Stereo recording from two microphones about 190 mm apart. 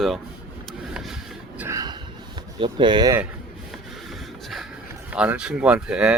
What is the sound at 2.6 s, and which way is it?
Speech, 25° right (ahead or behind).